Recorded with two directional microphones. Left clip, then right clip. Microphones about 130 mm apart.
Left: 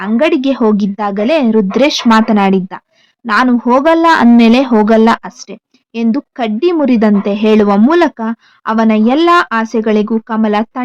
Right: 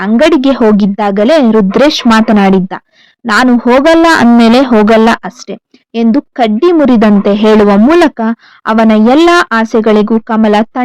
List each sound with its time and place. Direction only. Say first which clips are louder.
0.0 s speech: right 5 dB; 40° right (ahead or behind)